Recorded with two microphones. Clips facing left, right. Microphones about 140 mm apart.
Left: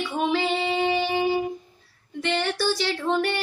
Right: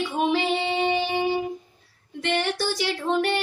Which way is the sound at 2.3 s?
15° right (ahead or behind).